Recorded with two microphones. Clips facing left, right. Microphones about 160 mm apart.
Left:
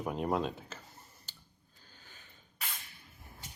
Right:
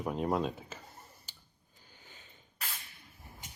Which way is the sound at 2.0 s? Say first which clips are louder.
Right 2 dB; 20° right (ahead or behind).